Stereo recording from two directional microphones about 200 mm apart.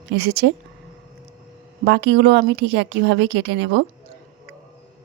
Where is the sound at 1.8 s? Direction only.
60° right (ahead or behind).